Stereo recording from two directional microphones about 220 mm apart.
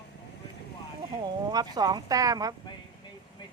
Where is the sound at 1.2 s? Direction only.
20° right (ahead or behind).